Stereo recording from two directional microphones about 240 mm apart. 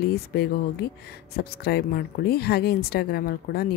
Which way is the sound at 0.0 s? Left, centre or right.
Left.